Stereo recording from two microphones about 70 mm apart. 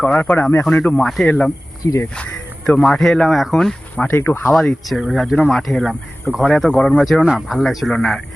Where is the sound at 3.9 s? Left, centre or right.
Left.